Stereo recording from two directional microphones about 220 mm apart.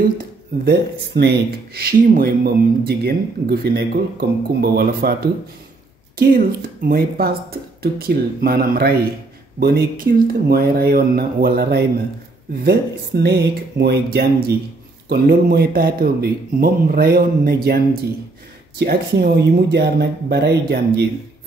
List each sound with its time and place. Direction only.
0.7 s speech: 50° right (ahead or behind)
6.1 s speech: 45° right (ahead or behind)